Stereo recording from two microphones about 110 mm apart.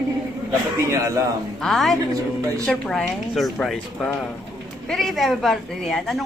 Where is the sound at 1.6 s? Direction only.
Centre (ahead or behind).